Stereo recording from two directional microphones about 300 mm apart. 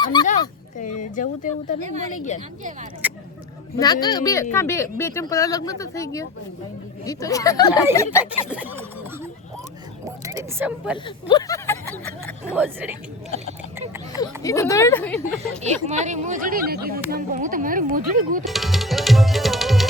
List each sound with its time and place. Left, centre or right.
0.0 s speech: centre
1.1 s speech: left
3.0 s a sound: centre
3.8 s speech: centre
8.3 s a sound: centre
10.2 s speech: centre
10.9 s speech: centre
12.5 s a sound: centre
14.2 s speech: centre
15.6 s speech: right
18.4 s tabla: centre